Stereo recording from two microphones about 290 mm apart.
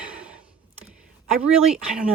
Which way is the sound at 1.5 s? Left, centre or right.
Centre.